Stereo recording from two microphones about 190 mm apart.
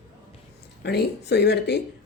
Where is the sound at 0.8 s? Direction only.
60° left (ahead or behind).